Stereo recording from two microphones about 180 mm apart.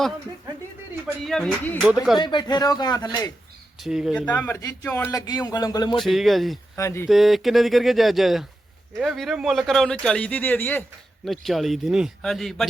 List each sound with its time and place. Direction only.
1.0 s speech: centre (ahead or behind)
2.1 s speech: 25° left (ahead or behind)
3.8 s speech: centre (ahead or behind)
4.3 s speech: 10° left (ahead or behind)
6.0 s speech: centre (ahead or behind)
6.7 s speech: 15° left (ahead or behind)
7.1 s speech: centre (ahead or behind)
11.3 s speech: centre (ahead or behind)